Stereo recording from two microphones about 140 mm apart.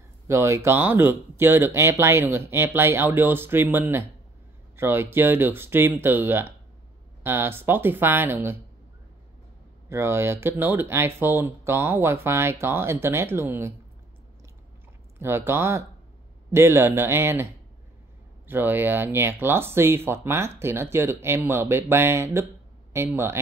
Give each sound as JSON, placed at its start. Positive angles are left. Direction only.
{"t": 0.3, "sound": "speech", "side_deg": -20}
{"t": 9.8, "sound": "speech", "side_deg": -20}
{"t": 15.1, "sound": "speech", "side_deg": -15}
{"t": 18.5, "sound": "speech", "side_deg": -15}